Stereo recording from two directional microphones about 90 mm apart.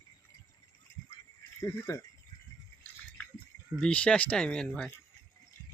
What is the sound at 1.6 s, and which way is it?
Speech, 40° left (ahead or behind).